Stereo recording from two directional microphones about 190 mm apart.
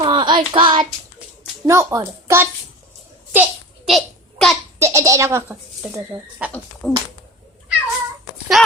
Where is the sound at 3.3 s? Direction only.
5° right (ahead or behind).